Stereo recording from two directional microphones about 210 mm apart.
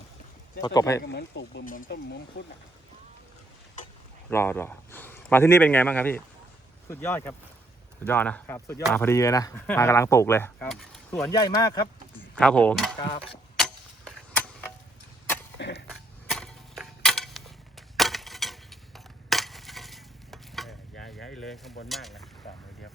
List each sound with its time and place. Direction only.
0.6 s a man's voice: 20° left (ahead or behind)
1.0 s speech: 50° left (ahead or behind)
4.3 s a man's voice: 10° left (ahead or behind)
11.1 s speech: 15° left (ahead or behind)
12.4 s mechanisms: 5° left (ahead or behind)
13.0 s a sound: 25° left (ahead or behind)
13.6 s clock: 5° left (ahead or behind)
15.5 s a sound: 55° left (ahead or behind)
15.9 s a sound: centre (ahead or behind)